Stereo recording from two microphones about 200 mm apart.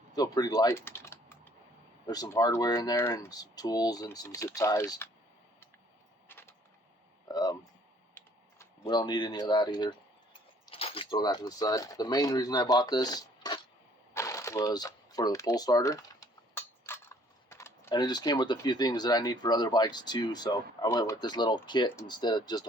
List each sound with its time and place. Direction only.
0.2 s typing: 20° left (ahead or behind)
2.0 s speech: 20° left (ahead or behind)
6.2 s a sound: 10° left (ahead or behind)
7.3 s speech: 20° left (ahead or behind)
8.2 s computer keyboard: 10° left (ahead or behind)
8.8 s speech: 20° left (ahead or behind)